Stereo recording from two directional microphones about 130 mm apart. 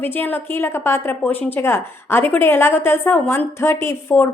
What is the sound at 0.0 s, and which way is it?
A woman's voice, 15° left (ahead or behind).